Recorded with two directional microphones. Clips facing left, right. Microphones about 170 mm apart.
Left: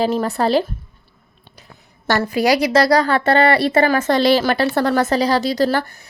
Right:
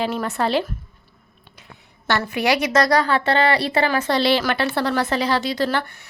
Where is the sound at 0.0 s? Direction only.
35° left (ahead or behind).